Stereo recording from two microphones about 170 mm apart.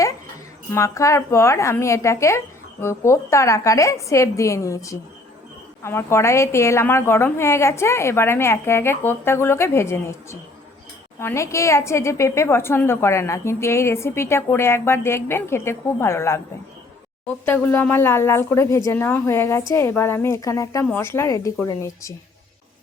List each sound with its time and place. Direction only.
0.7 s a woman's voice: 15° left (ahead or behind)